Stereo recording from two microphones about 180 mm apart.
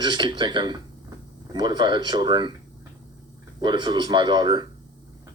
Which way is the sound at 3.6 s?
25° right (ahead or behind).